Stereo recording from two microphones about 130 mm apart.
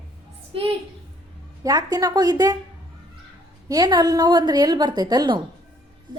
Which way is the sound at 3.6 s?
30° right (ahead or behind).